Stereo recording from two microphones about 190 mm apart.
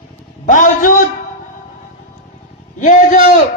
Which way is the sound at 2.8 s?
40° left (ahead or behind).